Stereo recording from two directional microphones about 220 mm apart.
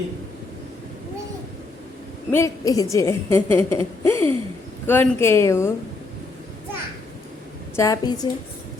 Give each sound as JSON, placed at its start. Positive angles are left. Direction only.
{"t": 2.3, "sound": "a woman's voice", "side_deg": 15}
{"t": 7.8, "sound": "a woman's voice", "side_deg": 15}